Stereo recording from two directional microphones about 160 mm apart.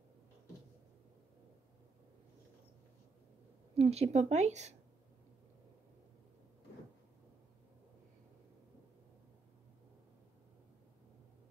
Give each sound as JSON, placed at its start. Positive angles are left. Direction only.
{"t": 3.7, "sound": "a woman's voice", "side_deg": -40}